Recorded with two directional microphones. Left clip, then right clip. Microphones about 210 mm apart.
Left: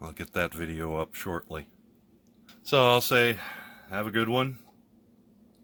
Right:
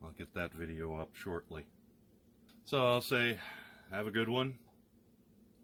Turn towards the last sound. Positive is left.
turn(degrees=60)  # may be behind; listen again after turning